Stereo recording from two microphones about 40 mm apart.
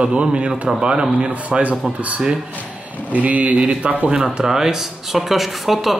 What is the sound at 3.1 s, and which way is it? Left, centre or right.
Speech, right.